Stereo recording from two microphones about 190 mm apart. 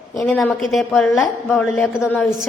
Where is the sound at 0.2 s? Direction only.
5° left (ahead or behind).